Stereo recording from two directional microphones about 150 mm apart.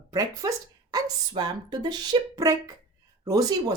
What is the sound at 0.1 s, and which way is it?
Speech, 25° right (ahead or behind).